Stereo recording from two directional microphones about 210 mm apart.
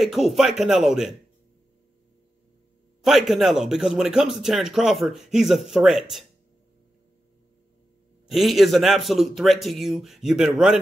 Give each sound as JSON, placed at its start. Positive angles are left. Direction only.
{"t": 0.0, "sound": "speech", "side_deg": 0}
{"t": 3.0, "sound": "speech", "side_deg": 0}
{"t": 8.3, "sound": "speech", "side_deg": 0}